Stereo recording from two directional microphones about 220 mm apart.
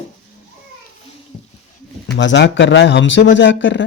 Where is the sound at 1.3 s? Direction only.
35° left (ahead or behind).